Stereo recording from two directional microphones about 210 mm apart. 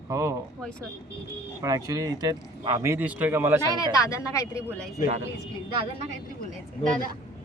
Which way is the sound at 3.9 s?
15° left (ahead or behind).